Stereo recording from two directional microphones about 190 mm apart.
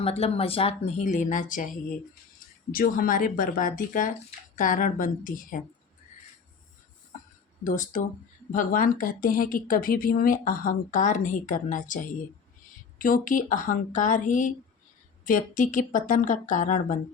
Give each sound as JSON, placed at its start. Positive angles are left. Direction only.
{"t": 0.0, "sound": "speech", "side_deg": 30}
{"t": 2.7, "sound": "speech", "side_deg": 50}
{"t": 7.6, "sound": "speech", "side_deg": 45}